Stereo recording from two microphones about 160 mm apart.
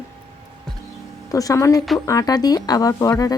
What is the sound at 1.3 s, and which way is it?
Speech, 20° left (ahead or behind).